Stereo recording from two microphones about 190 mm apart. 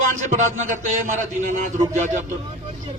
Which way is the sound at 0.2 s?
40° right (ahead or behind).